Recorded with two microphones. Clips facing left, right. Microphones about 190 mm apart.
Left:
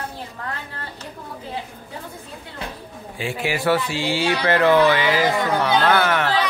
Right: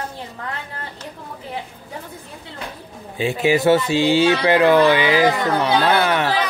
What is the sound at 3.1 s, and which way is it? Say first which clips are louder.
Speech: right 7 dB; 20° right (ahead or behind).